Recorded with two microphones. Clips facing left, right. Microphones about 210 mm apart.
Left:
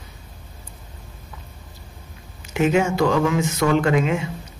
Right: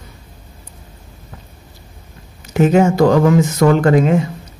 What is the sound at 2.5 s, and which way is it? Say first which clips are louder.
A man's voice: right 6 dB; 40° right (ahead or behind).